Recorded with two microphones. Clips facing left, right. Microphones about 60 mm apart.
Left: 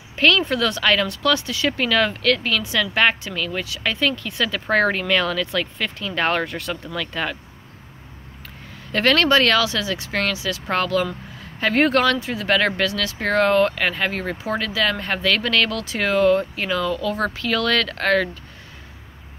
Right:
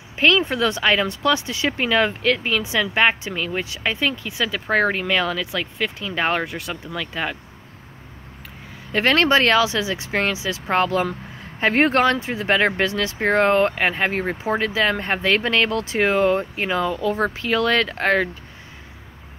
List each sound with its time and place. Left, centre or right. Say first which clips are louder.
0.1 s speech: even; centre
8.9 s speech: even; right